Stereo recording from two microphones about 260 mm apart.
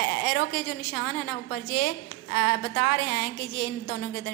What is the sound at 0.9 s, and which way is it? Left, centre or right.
A woman's voice, left.